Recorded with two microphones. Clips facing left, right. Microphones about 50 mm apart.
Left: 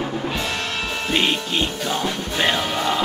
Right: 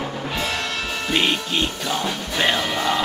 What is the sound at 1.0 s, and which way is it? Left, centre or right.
Music, centre.